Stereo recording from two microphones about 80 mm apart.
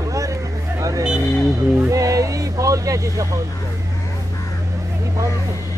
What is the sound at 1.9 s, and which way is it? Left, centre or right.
Music, right.